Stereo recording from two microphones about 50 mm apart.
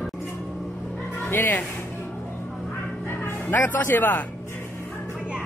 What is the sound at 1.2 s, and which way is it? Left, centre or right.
Speech, left.